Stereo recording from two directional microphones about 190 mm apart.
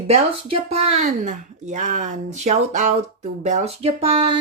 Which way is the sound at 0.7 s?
35° right (ahead or behind).